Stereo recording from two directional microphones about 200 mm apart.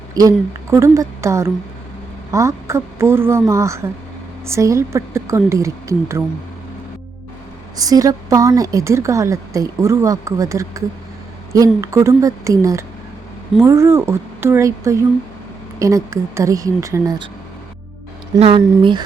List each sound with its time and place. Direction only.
0.1 s a woman's voice: 15° right (ahead or behind)
7.8 s a woman's voice: 15° right (ahead or behind)
18.3 s speech: 30° right (ahead or behind)